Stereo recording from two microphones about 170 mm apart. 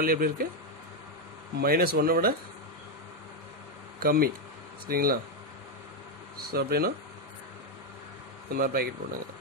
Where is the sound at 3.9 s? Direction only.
60° right (ahead or behind).